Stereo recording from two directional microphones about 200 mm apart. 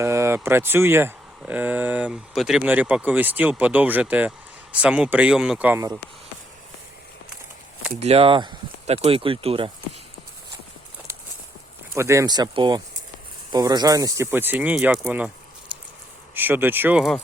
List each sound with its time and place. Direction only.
0.0 s speech: 15° right (ahead or behind)
7.9 s speech: 30° right (ahead or behind)
11.9 s speech: 15° right (ahead or behind)
16.3 s speech: 10° right (ahead or behind)